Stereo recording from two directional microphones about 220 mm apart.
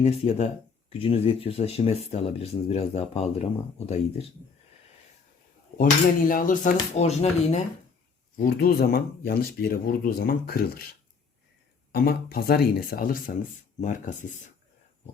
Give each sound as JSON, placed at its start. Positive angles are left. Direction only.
{"t": 0.0, "sound": "speech", "side_deg": 30}
{"t": 5.7, "sound": "speech", "side_deg": 40}
{"t": 8.4, "sound": "speech", "side_deg": 45}
{"t": 11.9, "sound": "speech", "side_deg": 45}